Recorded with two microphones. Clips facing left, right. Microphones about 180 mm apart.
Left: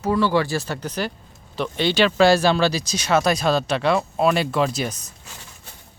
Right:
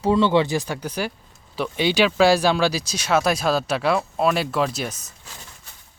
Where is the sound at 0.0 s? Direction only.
20° right (ahead or behind); by 4.9 s centre (ahead or behind).